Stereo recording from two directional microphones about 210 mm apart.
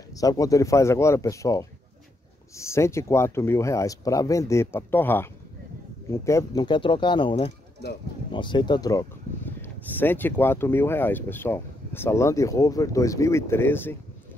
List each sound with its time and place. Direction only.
0.1 s speech: 15° left (ahead or behind)